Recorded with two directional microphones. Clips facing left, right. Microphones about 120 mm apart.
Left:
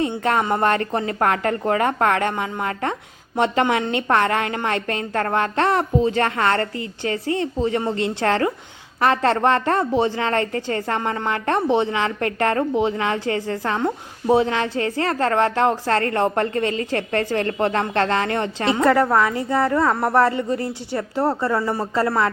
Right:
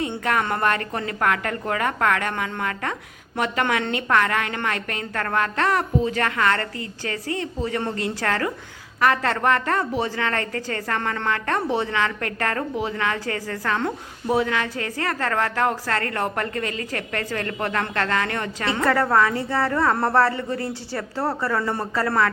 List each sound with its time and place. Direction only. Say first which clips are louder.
0.4 s a woman's voice: left 4 dB; 25° left (ahead or behind)